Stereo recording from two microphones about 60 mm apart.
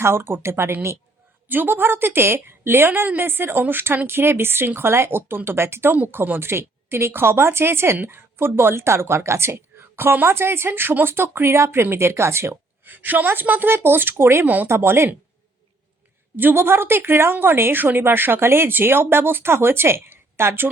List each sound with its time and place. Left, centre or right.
0.0 s speech: right
1.5 s speech: right
12.8 s speech: right
14.4 s speech: right
14.7 s speech: right
16.4 s speech: right